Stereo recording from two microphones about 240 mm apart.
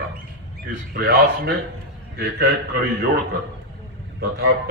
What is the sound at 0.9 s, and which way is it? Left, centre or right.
A man's voice, right.